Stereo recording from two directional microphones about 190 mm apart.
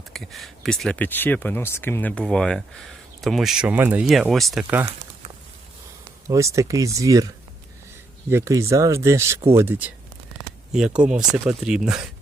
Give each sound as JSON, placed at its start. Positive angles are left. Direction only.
{"t": 0.1, "sound": "speech", "side_deg": 0}
{"t": 4.6, "sound": "speech", "side_deg": -10}
{"t": 6.2, "sound": "speech", "side_deg": -15}
{"t": 8.3, "sound": "speech", "side_deg": -15}